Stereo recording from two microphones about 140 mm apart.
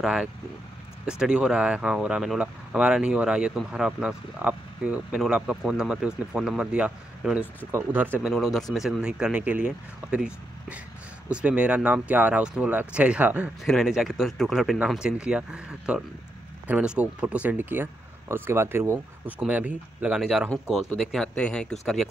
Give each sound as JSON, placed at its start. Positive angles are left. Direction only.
{"t": 0.0, "sound": "speech", "side_deg": -5}
{"t": 8.3, "sound": "speech", "side_deg": 0}
{"t": 13.7, "sound": "speech", "side_deg": 0}